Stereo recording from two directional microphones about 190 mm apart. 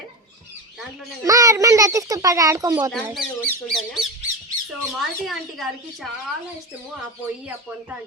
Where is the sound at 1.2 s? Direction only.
15° right (ahead or behind).